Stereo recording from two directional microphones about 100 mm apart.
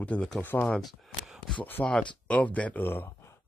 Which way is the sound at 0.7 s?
Centre (ahead or behind).